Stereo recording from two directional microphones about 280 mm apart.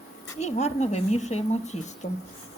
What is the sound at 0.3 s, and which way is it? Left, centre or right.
A woman's voice, left.